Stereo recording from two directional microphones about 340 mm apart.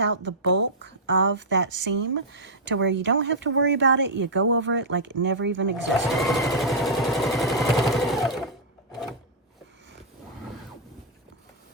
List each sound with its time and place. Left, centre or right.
0.0 s speech: right
6.1 s vehicle: centre